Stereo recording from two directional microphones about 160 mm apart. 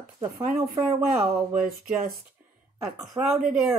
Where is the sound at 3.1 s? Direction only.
20° right (ahead or behind).